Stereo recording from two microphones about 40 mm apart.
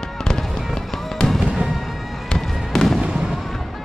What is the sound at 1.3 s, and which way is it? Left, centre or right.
Fireworks, centre.